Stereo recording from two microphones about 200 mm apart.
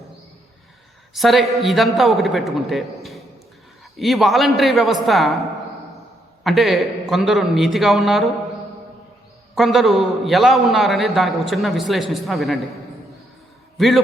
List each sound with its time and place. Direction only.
1.1 s a man's voice: centre (ahead or behind)
6.4 s a man's voice: centre (ahead or behind)
9.6 s a man's voice: centre (ahead or behind)
13.7 s a man's voice: centre (ahead or behind)